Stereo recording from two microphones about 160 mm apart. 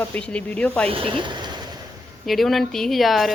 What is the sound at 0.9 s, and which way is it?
Speech, 35° right (ahead or behind).